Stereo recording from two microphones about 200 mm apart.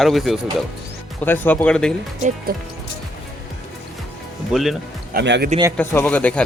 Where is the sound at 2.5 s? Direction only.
50° right (ahead or behind).